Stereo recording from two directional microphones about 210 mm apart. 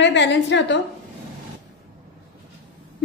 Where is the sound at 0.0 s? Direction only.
60° left (ahead or behind).